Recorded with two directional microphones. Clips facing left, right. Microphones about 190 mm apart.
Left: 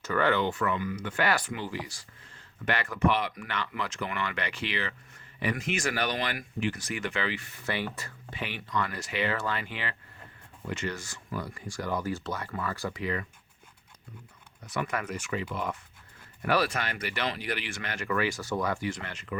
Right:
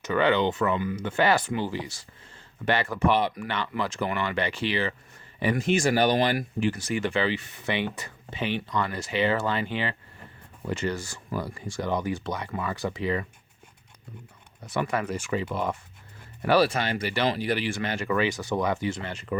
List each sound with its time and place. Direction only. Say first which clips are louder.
0.0 s speech: right 4 dB; 15° right (ahead or behind)
14.7 s speech: right 5 dB; 30° right (ahead or behind)